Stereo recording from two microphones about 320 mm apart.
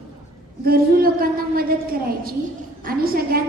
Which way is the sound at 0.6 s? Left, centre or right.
Right.